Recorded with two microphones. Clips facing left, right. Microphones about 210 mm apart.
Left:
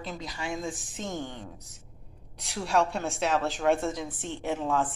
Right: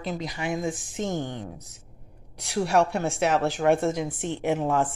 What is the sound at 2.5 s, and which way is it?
Speech, 55° right (ahead or behind).